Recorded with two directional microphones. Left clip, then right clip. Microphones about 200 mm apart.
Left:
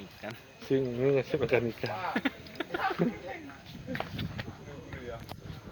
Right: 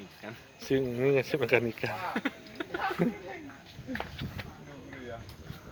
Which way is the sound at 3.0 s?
15° right (ahead or behind).